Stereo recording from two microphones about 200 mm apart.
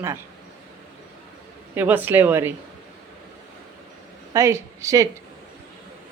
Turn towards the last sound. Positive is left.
turn(degrees=-15)  # may be behind; listen again after turning